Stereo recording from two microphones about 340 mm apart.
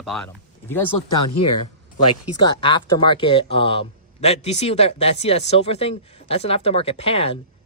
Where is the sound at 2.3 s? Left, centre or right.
Centre.